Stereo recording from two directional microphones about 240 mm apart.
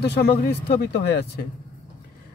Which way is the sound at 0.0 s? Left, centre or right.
Left.